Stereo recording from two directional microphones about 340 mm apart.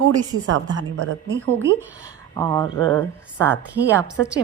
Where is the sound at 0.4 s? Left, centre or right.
Right.